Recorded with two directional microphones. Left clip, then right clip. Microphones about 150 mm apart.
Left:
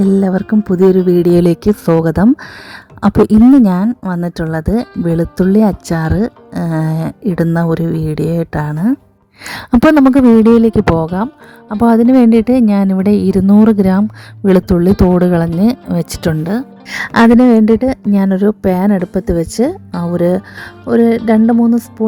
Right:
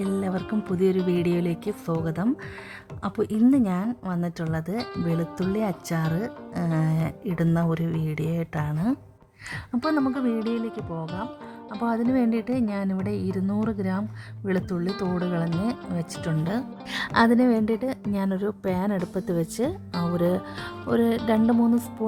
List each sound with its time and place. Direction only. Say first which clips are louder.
0.3 s speech: left 14 dB; 50° left (ahead or behind)
9.5 s speech: left 17 dB; 70° left (ahead or behind)
11.7 s a woman's voice: left 16 dB; 60° left (ahead or behind)
16.5 s speech: left 10 dB; 45° left (ahead or behind)